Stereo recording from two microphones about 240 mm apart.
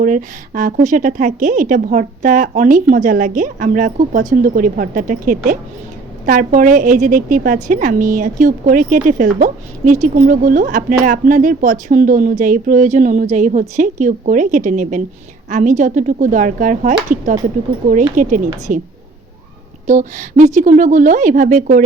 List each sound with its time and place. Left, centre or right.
0.0 s a woman's voice: right
19.9 s a woman's voice: right